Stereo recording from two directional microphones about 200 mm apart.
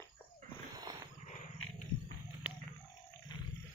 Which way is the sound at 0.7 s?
20° right (ahead or behind).